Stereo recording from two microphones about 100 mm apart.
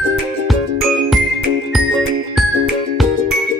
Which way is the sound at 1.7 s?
Centre (ahead or behind).